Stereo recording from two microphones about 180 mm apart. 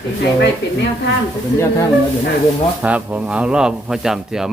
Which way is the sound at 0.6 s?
75° left (ahead or behind).